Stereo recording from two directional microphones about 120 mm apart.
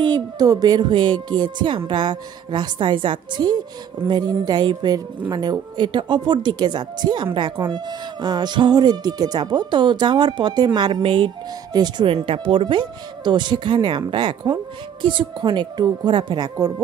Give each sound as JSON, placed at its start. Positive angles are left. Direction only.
{"t": 0.0, "sound": "speech", "side_deg": -35}